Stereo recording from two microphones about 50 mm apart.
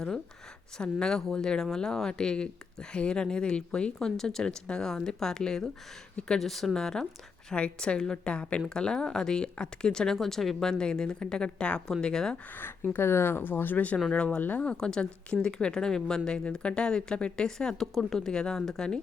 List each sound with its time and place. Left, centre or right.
0.8 s speech: centre
4.0 s speech: centre
6.4 s speech: centre
7.5 s speech: left
13.0 s speech: left; by 18.9 s centre